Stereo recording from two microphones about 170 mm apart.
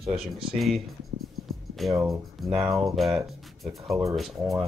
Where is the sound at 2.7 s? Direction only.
Centre (ahead or behind).